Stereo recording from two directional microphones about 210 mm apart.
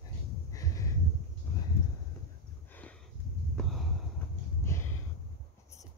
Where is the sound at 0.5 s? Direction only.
15° left (ahead or behind).